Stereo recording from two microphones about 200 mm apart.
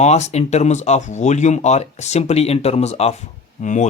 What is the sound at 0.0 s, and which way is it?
Speech, 35° left (ahead or behind).